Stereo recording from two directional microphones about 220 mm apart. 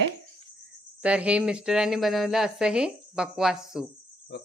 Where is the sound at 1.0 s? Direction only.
5° right (ahead or behind).